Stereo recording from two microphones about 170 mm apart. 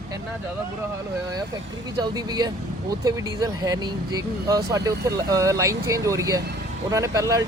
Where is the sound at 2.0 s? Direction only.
25° right (ahead or behind).